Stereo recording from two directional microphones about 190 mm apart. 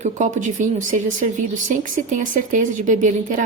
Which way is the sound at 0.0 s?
40° right (ahead or behind).